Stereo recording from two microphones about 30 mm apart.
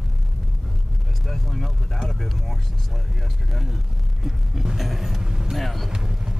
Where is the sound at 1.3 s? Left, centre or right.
Centre.